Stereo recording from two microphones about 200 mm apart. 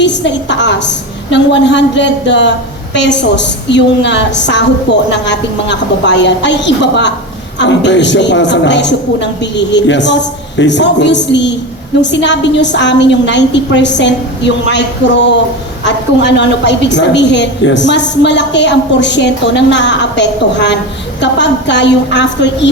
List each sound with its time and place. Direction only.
0.0 s a woman's voice: 60° left (ahead or behind)